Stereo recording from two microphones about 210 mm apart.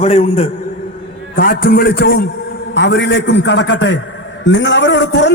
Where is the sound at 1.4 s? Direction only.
45° left (ahead or behind).